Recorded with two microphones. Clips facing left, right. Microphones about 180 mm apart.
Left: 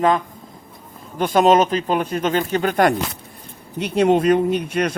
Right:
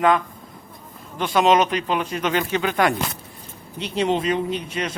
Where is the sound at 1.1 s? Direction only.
45° left (ahead or behind).